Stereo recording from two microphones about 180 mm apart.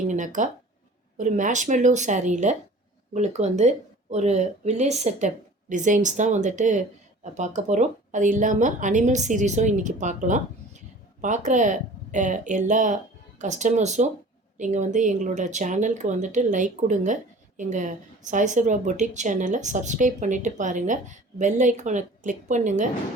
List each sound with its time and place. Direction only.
0.1 s a woman's voice: 45° right (ahead or behind)